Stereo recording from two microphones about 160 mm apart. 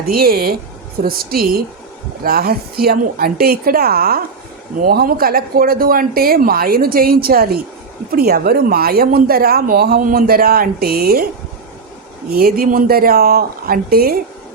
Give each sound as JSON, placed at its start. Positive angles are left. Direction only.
{"t": 0.1, "sound": "speech", "side_deg": -70}
{"t": 12.3, "sound": "speech", "side_deg": -70}